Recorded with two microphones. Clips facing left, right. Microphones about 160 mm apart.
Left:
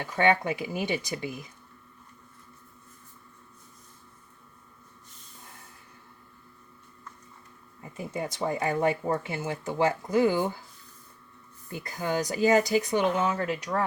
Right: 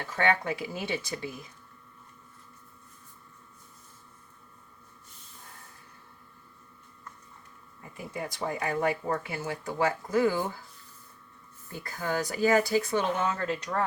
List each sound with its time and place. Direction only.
0.0 s speech: 20° left (ahead or behind)
7.8 s speech: 20° left (ahead or behind)
11.7 s speech: 20° left (ahead or behind)